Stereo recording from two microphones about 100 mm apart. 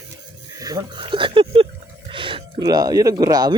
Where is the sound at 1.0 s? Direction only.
55° right (ahead or behind).